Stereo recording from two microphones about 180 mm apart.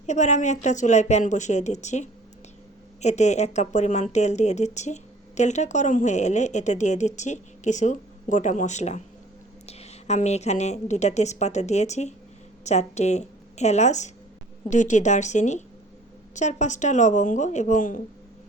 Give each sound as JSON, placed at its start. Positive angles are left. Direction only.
{"t": 0.0, "sound": "a woman's voice", "side_deg": 40}